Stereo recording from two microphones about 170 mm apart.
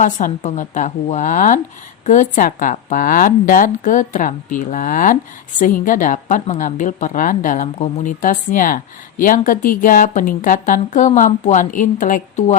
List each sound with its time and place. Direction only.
0.0 s a woman's voice: 50° left (ahead or behind)